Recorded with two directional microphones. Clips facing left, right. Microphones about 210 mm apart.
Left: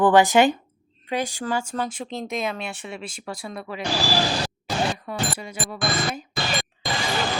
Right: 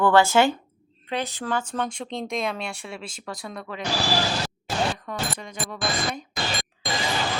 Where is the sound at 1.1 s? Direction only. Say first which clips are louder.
Left 2 dB; 10° left (ahead or behind).